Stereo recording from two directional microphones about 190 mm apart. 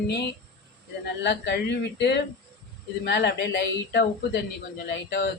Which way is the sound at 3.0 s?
65° left (ahead or behind).